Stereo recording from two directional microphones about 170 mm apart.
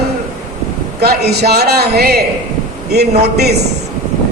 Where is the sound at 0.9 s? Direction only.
70° right (ahead or behind).